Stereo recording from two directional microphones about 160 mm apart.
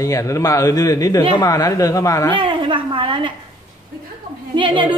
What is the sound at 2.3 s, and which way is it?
A woman's voice, 30° right (ahead or behind).